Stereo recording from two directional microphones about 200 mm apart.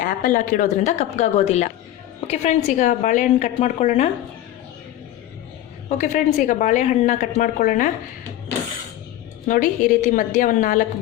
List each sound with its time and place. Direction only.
0.0 s a woman's voice: 40° left (ahead or behind)
6.0 s a woman's voice: 40° left (ahead or behind)
9.5 s a woman's voice: 40° left (ahead or behind)